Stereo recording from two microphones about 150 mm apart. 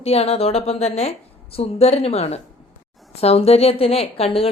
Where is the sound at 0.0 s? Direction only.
40° left (ahead or behind).